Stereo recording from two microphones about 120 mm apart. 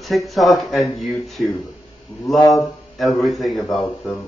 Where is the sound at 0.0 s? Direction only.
Centre (ahead or behind).